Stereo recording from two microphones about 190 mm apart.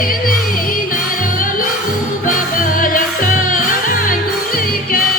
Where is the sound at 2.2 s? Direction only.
45° left (ahead or behind).